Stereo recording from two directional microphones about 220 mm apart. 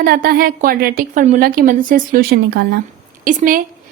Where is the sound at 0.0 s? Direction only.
40° right (ahead or behind).